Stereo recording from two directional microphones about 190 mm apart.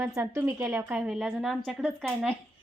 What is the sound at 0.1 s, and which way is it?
A woman's voice, 15° right (ahead or behind).